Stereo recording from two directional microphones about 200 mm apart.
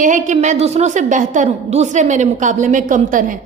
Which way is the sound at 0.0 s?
40° right (ahead or behind).